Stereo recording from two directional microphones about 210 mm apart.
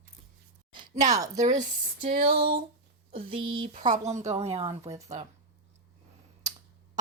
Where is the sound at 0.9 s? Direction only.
35° right (ahead or behind).